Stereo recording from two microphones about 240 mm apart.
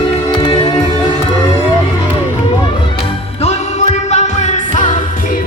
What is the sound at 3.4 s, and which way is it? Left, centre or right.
Music, left.